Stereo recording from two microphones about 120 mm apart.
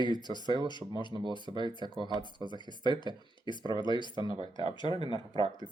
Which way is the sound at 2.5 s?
40° left (ahead or behind).